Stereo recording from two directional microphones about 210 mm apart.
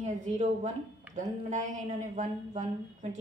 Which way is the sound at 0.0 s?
35° right (ahead or behind).